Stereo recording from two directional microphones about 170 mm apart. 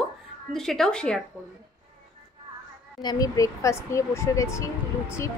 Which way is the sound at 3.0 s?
25° left (ahead or behind).